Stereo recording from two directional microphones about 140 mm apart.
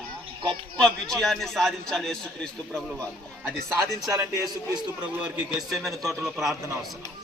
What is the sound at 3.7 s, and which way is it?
Speech, 20° right (ahead or behind).